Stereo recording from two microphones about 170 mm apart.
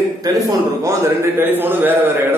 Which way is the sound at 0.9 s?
15° right (ahead or behind).